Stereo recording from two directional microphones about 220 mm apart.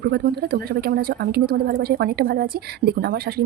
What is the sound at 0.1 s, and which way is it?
A woman's voice, 45° right (ahead or behind).